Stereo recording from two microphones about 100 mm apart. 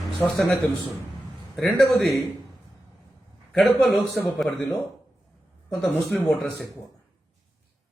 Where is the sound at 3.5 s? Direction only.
Centre (ahead or behind).